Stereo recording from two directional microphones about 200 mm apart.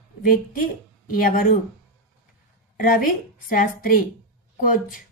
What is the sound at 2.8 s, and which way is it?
A woman's voice, 45° left (ahead or behind).